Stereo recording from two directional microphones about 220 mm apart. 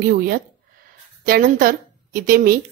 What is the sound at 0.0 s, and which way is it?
A woman's voice, 40° right (ahead or behind).